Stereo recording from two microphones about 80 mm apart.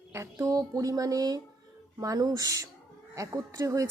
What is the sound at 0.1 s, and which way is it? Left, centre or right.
Speech, right.